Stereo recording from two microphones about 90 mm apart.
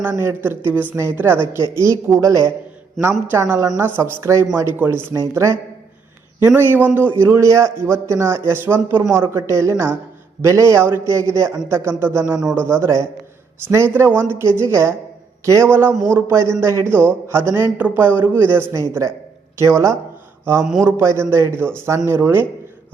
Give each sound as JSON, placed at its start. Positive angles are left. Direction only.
{"t": 0.0, "sound": "a man's voice", "side_deg": -25}
{"t": 3.0, "sound": "a man's voice", "side_deg": -25}
{"t": 6.6, "sound": "a man's voice", "side_deg": -20}
{"t": 17.7, "sound": "a man's voice", "side_deg": -20}
{"t": 18.7, "sound": "a man's voice", "side_deg": -35}